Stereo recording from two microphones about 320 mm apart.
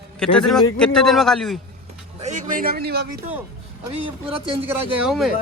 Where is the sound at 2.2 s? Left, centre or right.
Right.